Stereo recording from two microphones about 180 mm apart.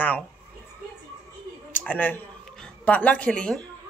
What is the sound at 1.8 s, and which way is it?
A woman's voice, 10° left (ahead or behind).